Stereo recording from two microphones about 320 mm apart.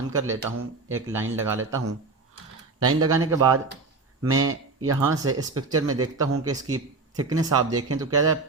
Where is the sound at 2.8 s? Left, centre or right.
Right.